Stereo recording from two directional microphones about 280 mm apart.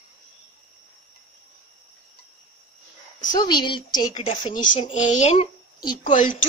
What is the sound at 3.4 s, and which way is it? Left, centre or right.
A child's voice, centre.